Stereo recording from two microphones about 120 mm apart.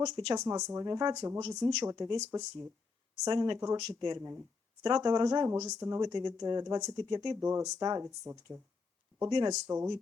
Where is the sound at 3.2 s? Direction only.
35° right (ahead or behind).